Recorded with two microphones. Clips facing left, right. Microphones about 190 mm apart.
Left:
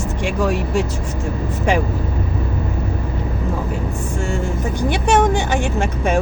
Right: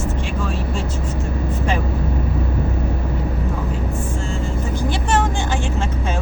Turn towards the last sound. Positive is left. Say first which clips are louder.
# left 4 dB
turn(degrees=70)  # may be behind; listen again after turning